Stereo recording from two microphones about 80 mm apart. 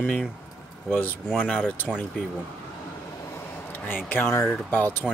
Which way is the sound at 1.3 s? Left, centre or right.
Centre.